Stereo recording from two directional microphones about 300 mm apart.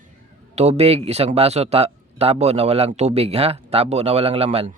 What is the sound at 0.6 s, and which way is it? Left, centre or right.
Speech, right.